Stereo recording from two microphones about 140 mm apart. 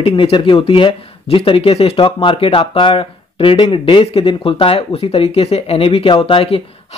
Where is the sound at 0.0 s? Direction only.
40° left (ahead or behind).